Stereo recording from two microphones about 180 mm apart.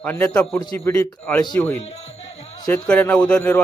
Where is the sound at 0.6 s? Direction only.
20° left (ahead or behind).